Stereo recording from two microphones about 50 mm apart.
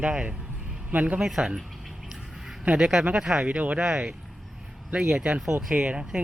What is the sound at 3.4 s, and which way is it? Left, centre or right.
Speech, right.